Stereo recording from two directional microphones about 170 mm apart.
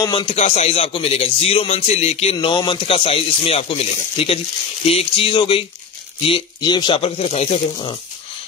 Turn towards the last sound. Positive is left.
turn(degrees=35)  # may be behind; listen again after turning